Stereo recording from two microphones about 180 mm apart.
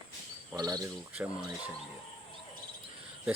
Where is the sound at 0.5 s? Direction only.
20° right (ahead or behind).